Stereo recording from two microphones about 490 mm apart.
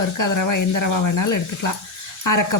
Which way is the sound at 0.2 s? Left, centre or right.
Left.